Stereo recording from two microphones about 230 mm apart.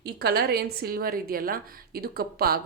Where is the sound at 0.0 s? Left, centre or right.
Right.